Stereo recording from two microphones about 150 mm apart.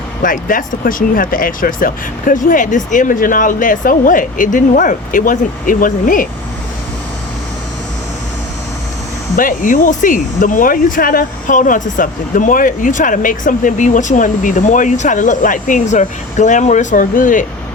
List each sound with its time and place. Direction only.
0.2 s speech: 65° left (ahead or behind)
9.3 s speech: 65° left (ahead or behind)